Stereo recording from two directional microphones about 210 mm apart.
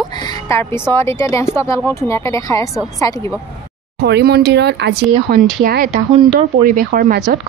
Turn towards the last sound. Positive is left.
turn(degrees=-45)  # may be behind; listen again after turning